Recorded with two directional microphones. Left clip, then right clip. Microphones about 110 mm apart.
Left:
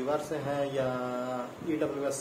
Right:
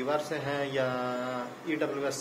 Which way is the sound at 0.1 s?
10° left (ahead or behind).